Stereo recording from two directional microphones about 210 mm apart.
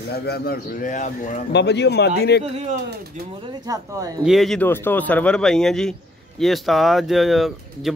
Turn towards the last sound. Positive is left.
turn(degrees=0)  # may be behind; listen again after turning